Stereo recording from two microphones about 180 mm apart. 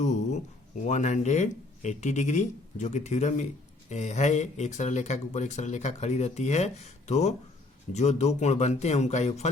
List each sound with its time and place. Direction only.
0.0 s speech: 40° left (ahead or behind)